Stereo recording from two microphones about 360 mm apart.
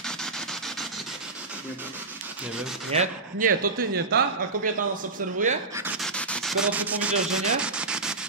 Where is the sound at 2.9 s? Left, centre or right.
Centre.